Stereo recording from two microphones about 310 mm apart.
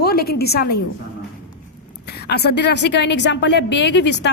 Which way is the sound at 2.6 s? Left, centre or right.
Left.